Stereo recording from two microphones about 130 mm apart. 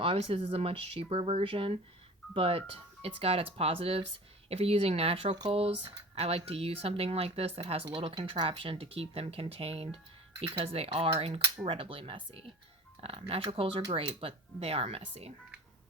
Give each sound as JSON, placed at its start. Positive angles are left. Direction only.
{"t": 0.0, "sound": "speech", "side_deg": -45}